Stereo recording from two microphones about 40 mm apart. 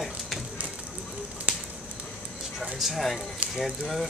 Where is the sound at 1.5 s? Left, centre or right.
Right.